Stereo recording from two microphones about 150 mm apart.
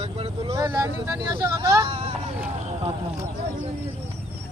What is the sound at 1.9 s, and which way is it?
Speech, 40° right (ahead or behind).